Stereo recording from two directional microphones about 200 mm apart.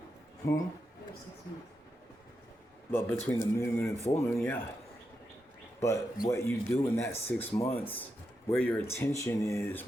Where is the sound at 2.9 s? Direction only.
10° left (ahead or behind).